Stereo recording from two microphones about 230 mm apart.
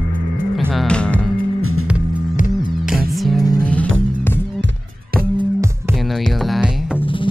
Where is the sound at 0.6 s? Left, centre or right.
Centre.